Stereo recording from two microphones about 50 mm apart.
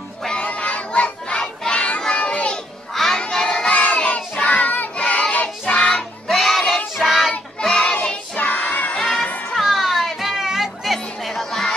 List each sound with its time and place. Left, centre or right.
0.3 s a sound: left
1.7 s children playing: left
3.0 s music: centre
3.7 s child singing: left
5.0 s child singing: centre
6.2 s music: centre
7.0 s child singing: centre
7.6 s child singing: centre
8.4 s child singing: left
8.9 s music: centre